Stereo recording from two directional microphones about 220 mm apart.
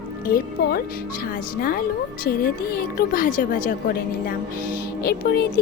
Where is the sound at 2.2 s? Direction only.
40° left (ahead or behind).